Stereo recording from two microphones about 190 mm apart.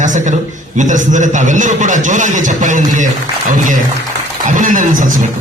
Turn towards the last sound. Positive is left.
turn(degrees=-45)  # may be behind; listen again after turning